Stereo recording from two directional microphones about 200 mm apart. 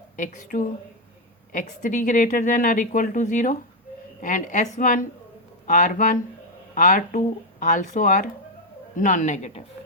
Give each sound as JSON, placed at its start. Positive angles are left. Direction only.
{"t": 0.2, "sound": "a woman's voice", "side_deg": 40}